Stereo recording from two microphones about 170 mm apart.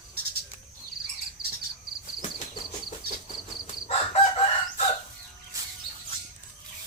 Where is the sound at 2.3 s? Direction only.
25° left (ahead or behind).